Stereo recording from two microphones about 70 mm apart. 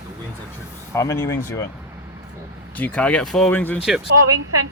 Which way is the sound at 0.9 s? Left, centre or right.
Left.